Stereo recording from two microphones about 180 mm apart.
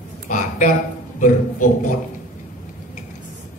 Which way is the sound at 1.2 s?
45° left (ahead or behind).